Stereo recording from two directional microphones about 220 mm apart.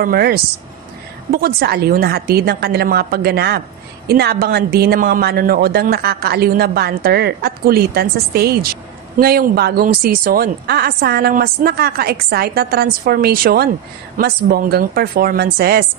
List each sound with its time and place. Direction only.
0.0 s a woman's voice: 45° right (ahead or behind)